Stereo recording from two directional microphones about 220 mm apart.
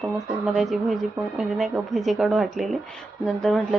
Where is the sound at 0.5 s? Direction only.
Centre (ahead or behind).